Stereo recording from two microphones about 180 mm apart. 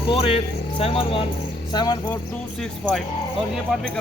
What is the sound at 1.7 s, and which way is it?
Music, 25° left (ahead or behind).